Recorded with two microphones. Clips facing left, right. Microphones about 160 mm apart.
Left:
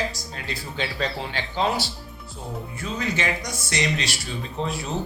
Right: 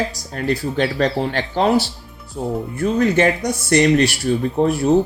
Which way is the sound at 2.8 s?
60° right (ahead or behind).